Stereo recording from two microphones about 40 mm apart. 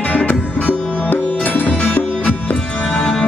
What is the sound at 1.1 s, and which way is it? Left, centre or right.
Music, left.